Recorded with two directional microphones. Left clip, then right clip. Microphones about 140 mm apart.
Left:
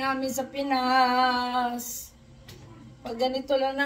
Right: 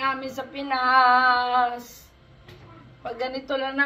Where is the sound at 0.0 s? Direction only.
35° left (ahead or behind).